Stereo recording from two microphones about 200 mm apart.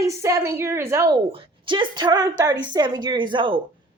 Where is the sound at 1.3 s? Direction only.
25° right (ahead or behind).